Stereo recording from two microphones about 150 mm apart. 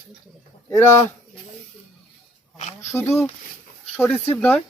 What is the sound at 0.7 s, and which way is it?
Speech, 20° left (ahead or behind).